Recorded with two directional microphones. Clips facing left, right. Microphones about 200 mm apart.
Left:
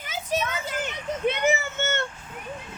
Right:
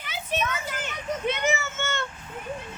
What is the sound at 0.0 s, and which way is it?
Children playing, 45° left (ahead or behind).